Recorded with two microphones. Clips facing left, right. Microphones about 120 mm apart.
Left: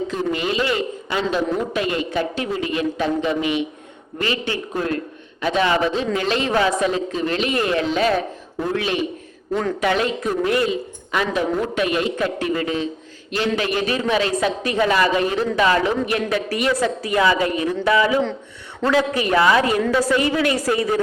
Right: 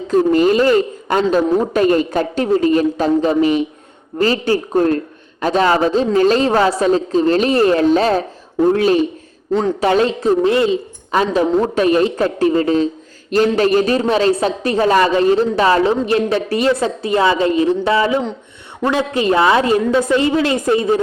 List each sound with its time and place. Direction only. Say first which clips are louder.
0.1 s a woman's voice: right 10 dB; 40° right (ahead or behind); by 21.0 s 25° right (ahead or behind)